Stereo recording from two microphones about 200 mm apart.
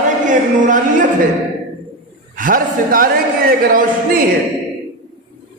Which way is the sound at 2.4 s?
45° right (ahead or behind).